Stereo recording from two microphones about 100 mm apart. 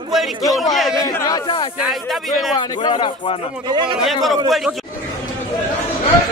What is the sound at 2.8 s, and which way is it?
Speech, 55° left (ahead or behind).